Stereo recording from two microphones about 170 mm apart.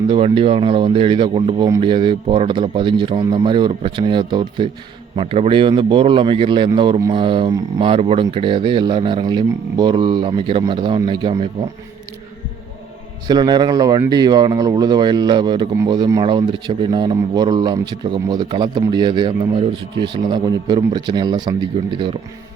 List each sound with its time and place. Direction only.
0.1 s a man's voice: 30° right (ahead or behind)
13.2 s speech: 25° right (ahead or behind)